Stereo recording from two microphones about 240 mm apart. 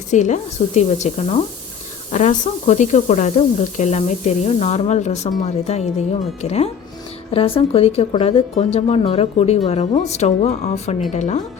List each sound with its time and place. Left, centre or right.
0.1 s speech: left